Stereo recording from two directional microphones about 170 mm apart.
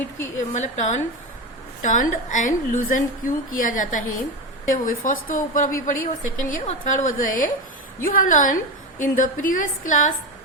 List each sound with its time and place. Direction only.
0.5 s a woman's voice: 45° left (ahead or behind)